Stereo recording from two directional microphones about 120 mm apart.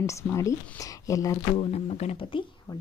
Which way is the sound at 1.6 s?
60° left (ahead or behind).